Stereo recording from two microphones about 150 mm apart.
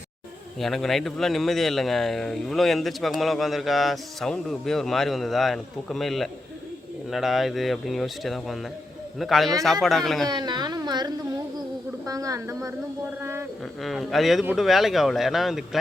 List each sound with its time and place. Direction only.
0.6 s speech: centre (ahead or behind)
10.2 s a sound: 30° right (ahead or behind)
13.8 s speech: centre (ahead or behind)